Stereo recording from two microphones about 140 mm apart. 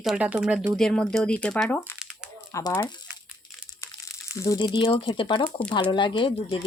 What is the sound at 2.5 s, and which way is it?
Speech, 30° left (ahead or behind).